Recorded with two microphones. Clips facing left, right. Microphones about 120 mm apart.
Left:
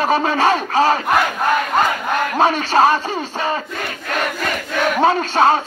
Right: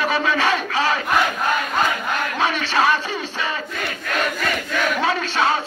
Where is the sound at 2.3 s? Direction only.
45° left (ahead or behind).